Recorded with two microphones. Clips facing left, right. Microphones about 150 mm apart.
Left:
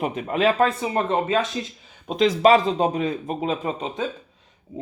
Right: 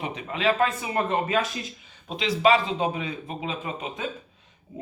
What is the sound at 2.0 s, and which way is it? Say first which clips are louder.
A man's voice: left 5 dB; 40° left (ahead or behind).